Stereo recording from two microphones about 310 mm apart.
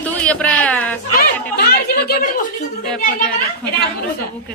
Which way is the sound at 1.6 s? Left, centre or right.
Left.